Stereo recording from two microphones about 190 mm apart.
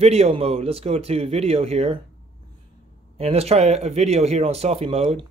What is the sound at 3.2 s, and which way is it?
Speech, 30° right (ahead or behind).